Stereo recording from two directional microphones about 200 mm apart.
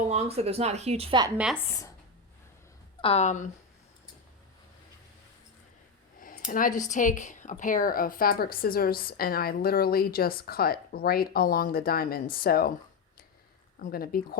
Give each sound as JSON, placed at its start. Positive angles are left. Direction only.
{"t": 0.1, "sound": "a woman's voice", "side_deg": -35}
{"t": 3.0, "sound": "speech", "side_deg": 30}
{"t": 6.1, "sound": "speech", "side_deg": 45}
{"t": 13.7, "sound": "speech", "side_deg": 50}